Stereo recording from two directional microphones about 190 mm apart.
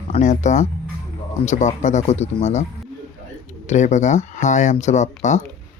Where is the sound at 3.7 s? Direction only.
40° left (ahead or behind).